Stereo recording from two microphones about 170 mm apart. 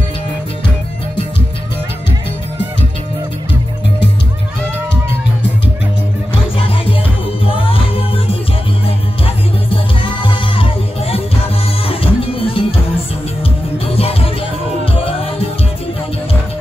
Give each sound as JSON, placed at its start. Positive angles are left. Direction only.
{"t": 6.3, "sound": "music", "side_deg": 30}
{"t": 13.8, "sound": "music", "side_deg": 35}